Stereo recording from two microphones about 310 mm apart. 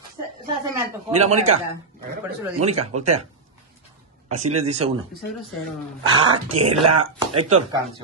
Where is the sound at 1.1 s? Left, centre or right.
Right.